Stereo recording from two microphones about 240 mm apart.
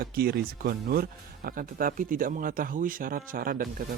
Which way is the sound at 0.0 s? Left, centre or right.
Right.